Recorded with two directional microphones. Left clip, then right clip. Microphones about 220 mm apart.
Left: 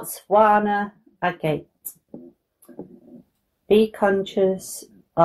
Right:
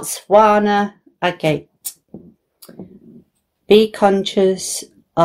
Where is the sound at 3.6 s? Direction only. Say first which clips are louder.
Right 6 dB; 45° right (ahead or behind).